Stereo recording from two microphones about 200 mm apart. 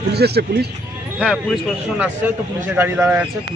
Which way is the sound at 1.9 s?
10° right (ahead or behind).